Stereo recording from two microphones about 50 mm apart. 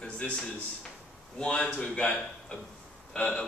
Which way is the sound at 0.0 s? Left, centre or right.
Centre.